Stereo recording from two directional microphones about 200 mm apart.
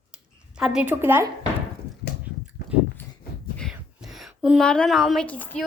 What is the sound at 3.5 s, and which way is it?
A woman's voice, centre (ahead or behind).